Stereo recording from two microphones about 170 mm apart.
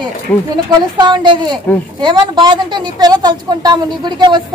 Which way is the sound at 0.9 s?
25° right (ahead or behind).